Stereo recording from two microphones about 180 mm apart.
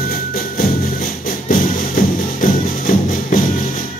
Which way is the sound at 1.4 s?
50° left (ahead or behind).